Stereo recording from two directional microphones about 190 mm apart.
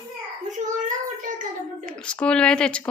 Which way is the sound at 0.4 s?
40° right (ahead or behind).